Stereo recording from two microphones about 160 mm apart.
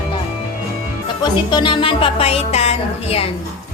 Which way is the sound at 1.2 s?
30° left (ahead or behind).